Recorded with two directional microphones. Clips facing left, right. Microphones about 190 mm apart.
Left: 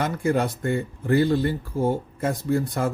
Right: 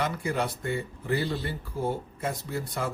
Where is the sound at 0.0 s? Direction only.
45° left (ahead or behind).